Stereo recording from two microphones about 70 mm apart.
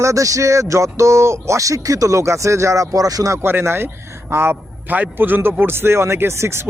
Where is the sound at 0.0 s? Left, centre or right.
Right.